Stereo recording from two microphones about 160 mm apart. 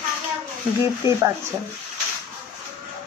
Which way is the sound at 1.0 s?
25° left (ahead or behind).